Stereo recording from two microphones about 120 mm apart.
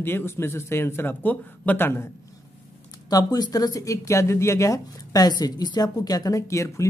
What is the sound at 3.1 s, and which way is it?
Speech, 35° left (ahead or behind).